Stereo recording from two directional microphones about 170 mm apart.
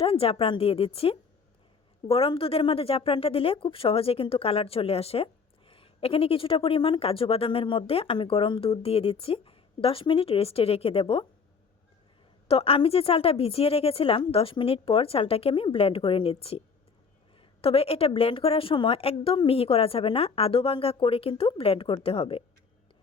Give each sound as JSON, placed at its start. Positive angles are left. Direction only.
{"t": 0.0, "sound": "speech", "side_deg": 35}
{"t": 12.5, "sound": "speech", "side_deg": 35}